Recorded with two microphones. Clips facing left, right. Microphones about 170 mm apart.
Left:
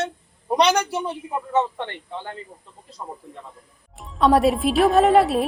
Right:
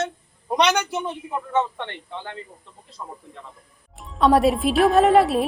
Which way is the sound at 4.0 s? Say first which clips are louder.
Even; centre (ahead or behind).